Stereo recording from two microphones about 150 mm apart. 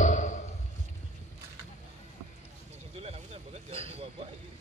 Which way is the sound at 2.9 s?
40° right (ahead or behind).